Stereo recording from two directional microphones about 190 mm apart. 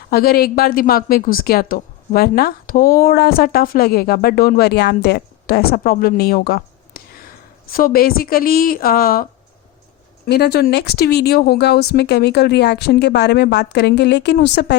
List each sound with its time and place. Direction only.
0.1 s a woman's voice: 50° left (ahead or behind)
10.2 s speech: 55° left (ahead or behind)